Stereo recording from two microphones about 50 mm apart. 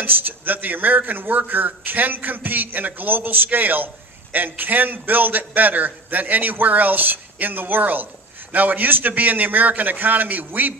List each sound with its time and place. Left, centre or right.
0.0 s a man's voice: right